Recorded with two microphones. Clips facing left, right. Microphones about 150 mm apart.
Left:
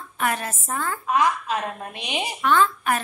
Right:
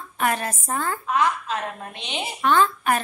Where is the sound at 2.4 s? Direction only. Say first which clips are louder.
Right 1 dB; 30° right (ahead or behind).